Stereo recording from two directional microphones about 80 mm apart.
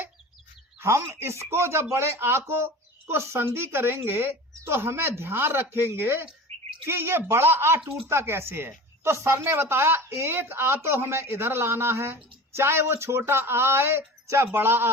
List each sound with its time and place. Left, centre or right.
0.8 s a woman's voice: right